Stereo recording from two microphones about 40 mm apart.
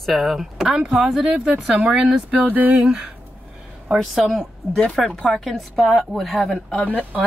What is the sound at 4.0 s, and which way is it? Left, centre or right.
Speech, centre.